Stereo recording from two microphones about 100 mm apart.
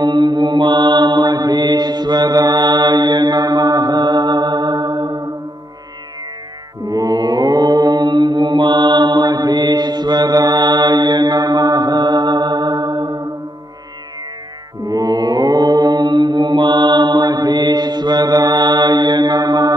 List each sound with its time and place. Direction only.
0.0 s mantra: 50° right (ahead or behind)
6.8 s mantra: 35° right (ahead or behind)
14.9 s mantra: 40° right (ahead or behind)